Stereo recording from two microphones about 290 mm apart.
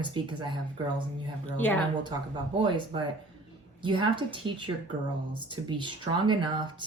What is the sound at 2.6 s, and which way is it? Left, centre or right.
Speech, centre.